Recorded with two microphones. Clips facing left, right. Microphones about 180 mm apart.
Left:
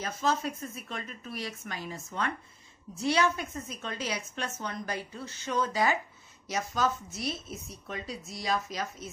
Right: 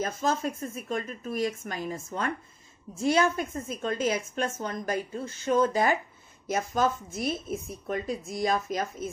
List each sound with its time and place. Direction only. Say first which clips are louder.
0.0 s a woman's voice: right 2 dB; 50° right (ahead or behind)